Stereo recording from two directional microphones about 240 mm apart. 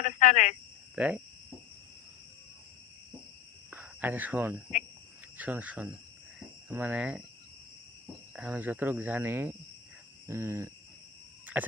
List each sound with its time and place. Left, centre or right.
0.0 s speech: left
0.9 s speech: centre
3.7 s cricket: centre
5.4 s speech: centre
8.4 s speech: centre
11.6 s a sound: centre